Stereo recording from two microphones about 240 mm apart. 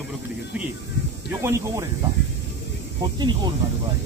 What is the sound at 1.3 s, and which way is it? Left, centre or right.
Speech, centre.